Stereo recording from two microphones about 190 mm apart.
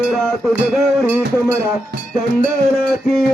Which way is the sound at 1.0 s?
10° right (ahead or behind).